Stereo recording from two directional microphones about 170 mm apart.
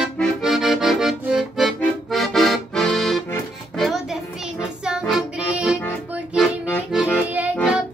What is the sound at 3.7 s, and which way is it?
Music, centre (ahead or behind).